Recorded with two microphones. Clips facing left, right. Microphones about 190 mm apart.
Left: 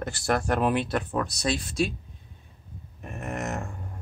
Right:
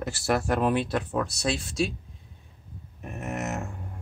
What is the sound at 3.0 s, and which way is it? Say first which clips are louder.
Speech: even; 5° right (ahead or behind).